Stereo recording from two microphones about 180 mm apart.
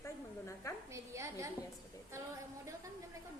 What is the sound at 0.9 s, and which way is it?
Speech, 15° right (ahead or behind).